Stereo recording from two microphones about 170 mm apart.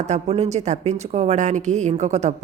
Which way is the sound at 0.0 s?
40° right (ahead or behind).